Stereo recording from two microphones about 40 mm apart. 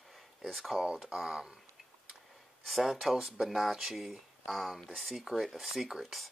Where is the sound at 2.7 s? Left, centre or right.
Centre.